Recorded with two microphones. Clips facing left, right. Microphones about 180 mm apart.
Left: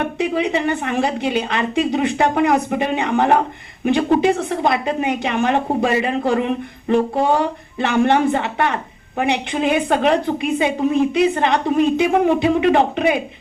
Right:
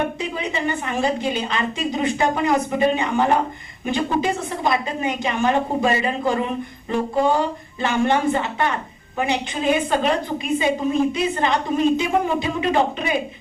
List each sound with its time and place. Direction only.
0.2 s a woman's voice: 65° left (ahead or behind)